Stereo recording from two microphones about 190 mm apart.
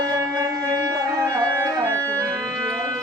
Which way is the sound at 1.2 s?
20° right (ahead or behind).